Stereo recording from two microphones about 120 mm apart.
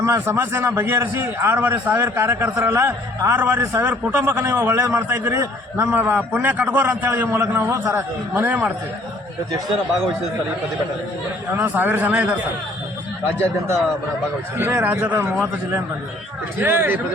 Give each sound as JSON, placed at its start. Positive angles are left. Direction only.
{"t": 0.0, "sound": "a man's voice", "side_deg": -20}
{"t": 8.3, "sound": "speech", "side_deg": -15}
{"t": 11.5, "sound": "speech", "side_deg": -15}
{"t": 14.6, "sound": "speech", "side_deg": -15}